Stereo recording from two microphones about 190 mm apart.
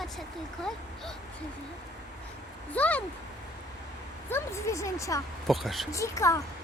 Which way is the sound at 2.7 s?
10° left (ahead or behind).